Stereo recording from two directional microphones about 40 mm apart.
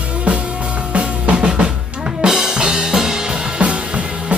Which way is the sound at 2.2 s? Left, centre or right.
Centre.